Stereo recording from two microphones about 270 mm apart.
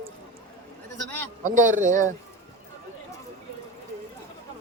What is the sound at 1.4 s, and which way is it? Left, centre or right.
Speech, right.